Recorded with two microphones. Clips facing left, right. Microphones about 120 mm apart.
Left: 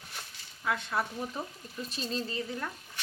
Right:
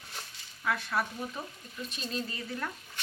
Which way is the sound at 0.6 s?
20° left (ahead or behind).